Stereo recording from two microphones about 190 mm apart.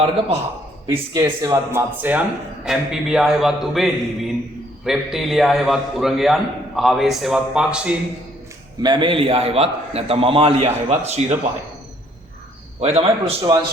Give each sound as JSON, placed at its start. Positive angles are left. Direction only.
{"t": 0.9, "sound": "a man's voice", "side_deg": -20}
{"t": 8.8, "sound": "a man's voice", "side_deg": -25}
{"t": 12.8, "sound": "a man's voice", "side_deg": -30}